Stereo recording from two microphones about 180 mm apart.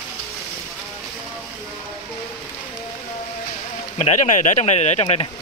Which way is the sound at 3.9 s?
40° left (ahead or behind).